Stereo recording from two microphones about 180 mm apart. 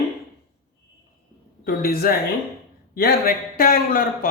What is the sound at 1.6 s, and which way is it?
A man's voice, 55° left (ahead or behind).